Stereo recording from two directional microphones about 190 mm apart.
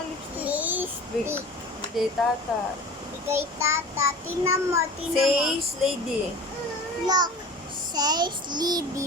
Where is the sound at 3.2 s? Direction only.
15° right (ahead or behind).